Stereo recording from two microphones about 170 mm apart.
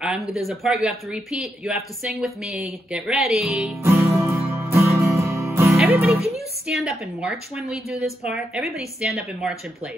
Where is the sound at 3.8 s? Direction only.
15° right (ahead or behind).